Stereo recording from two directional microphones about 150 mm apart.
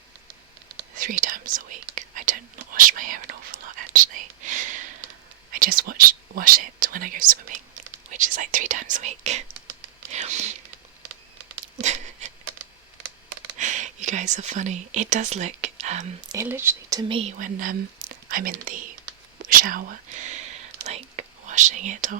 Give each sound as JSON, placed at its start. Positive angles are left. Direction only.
{"t": 0.9, "sound": "whispering", "side_deg": -65}
{"t": 5.5, "sound": "speech", "side_deg": -70}
{"t": 11.8, "sound": "a sound", "side_deg": -50}
{"t": 13.6, "sound": "speech", "side_deg": -55}
{"t": 16.3, "sound": "speech", "side_deg": -15}
{"t": 17.0, "sound": "speech", "side_deg": -35}
{"t": 17.3, "sound": "speech", "side_deg": -60}
{"t": 19.4, "sound": "whispering", "side_deg": -70}